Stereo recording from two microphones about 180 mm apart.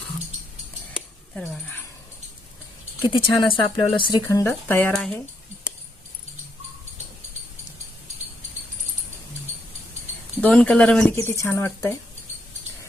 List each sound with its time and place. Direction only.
3.1 s speech: 30° left (ahead or behind); by 5.1 s 5° left (ahead or behind)
10.4 s speech: 5° left (ahead or behind)